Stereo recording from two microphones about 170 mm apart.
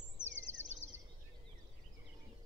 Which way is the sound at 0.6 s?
45° right (ahead or behind).